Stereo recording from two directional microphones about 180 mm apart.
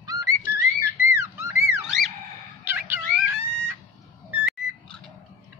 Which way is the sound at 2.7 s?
10° right (ahead or behind).